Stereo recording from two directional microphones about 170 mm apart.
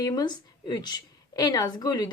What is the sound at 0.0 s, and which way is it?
Speech, 25° left (ahead or behind).